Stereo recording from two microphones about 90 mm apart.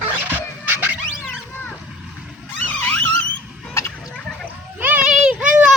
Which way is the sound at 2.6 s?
20° left (ahead or behind).